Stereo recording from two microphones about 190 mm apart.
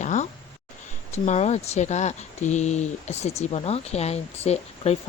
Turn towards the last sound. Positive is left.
turn(degrees=35)  # may be behind; listen again after turning